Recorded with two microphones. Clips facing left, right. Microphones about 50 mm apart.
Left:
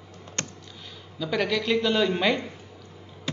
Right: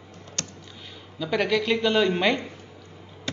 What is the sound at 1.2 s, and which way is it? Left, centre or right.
Speech, centre.